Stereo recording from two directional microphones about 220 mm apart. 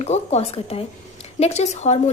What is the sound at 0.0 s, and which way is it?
A woman's voice, 30° left (ahead or behind).